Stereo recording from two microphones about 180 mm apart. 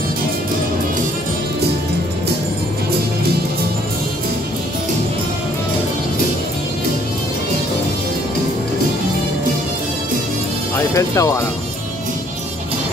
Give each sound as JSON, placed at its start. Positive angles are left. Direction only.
{"t": 11.0, "sound": "speech", "side_deg": 15}